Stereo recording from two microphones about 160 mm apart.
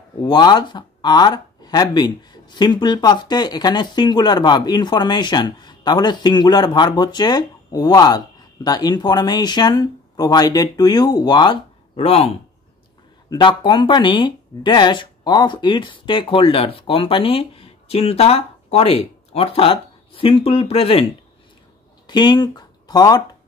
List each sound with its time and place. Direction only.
0.2 s speech: 25° left (ahead or behind)
13.3 s speech: 30° left (ahead or behind)
22.0 s speech: 25° left (ahead or behind)